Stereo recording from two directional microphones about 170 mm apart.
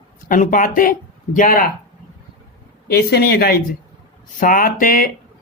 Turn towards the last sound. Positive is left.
turn(degrees=55)  # may be behind; listen again after turning